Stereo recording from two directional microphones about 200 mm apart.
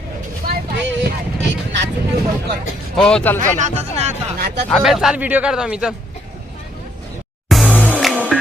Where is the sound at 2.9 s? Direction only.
5° left (ahead or behind).